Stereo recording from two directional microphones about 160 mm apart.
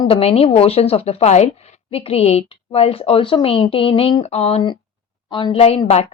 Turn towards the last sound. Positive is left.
turn(degrees=40)  # may be behind; listen again after turning